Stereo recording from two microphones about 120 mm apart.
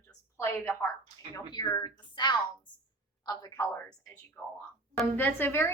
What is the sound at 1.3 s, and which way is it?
Speech, 35° left (ahead or behind).